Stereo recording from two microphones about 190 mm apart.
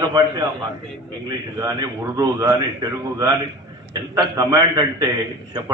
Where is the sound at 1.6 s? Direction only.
20° right (ahead or behind).